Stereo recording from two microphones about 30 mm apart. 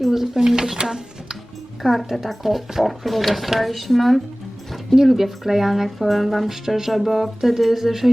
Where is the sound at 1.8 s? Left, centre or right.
Centre.